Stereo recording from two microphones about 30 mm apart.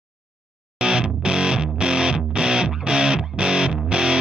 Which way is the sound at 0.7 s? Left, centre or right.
Right.